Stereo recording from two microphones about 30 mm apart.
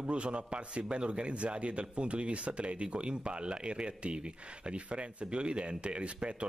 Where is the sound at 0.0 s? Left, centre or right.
Right.